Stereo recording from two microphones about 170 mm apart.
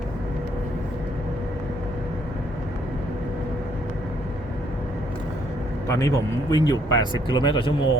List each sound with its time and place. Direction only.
5.9 s speech: 20° left (ahead or behind)